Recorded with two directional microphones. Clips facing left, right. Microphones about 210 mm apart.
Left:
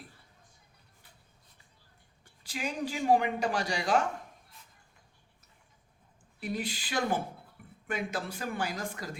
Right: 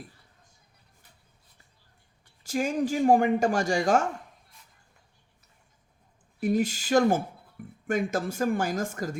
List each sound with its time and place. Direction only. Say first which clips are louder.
2.4 s speech: right 8 dB; 45° right (ahead or behind)
6.4 s speech: right 10 dB; 45° right (ahead or behind)